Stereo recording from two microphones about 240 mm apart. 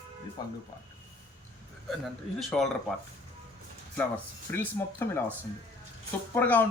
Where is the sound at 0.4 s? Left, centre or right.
Centre.